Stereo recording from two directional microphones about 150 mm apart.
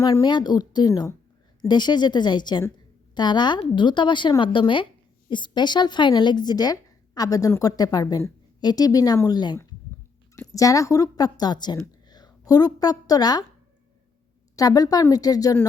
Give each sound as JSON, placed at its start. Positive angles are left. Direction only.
{"t": 0.0, "sound": "a woman's voice", "side_deg": 25}
{"t": 14.5, "sound": "speech", "side_deg": 25}